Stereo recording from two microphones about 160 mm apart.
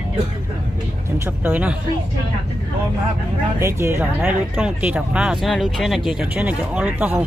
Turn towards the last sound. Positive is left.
turn(degrees=-10)  # may be behind; listen again after turning